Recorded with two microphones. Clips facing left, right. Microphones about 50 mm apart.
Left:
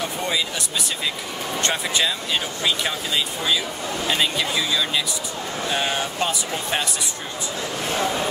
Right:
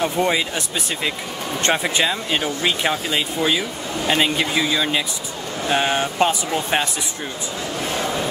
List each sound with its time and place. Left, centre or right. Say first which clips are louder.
0.0 s speech: right 6 dB; right
1.6 s speech: right 4 dB; right